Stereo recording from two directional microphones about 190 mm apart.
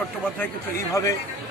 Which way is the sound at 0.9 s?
15° left (ahead or behind).